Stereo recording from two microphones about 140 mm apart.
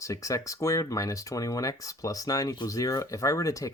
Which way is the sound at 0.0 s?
25° left (ahead or behind).